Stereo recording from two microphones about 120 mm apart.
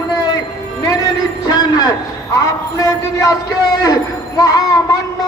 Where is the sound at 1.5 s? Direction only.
35° left (ahead or behind).